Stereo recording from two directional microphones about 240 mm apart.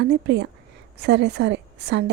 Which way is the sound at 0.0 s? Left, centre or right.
Right.